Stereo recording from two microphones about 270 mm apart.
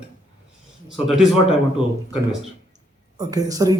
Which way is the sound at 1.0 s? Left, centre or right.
Centre.